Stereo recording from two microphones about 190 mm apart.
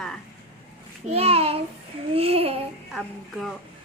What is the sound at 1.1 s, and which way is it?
Child singing, 30° right (ahead or behind).